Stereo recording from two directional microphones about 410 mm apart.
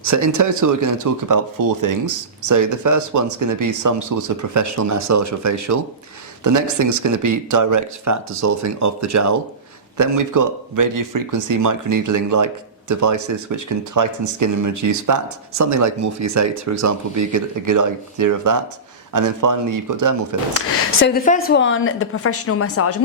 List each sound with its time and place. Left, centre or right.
0.0 s speech: right
20.5 s a woman's voice: left